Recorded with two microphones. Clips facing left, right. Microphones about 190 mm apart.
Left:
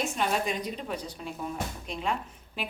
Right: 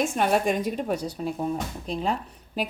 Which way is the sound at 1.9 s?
30° right (ahead or behind).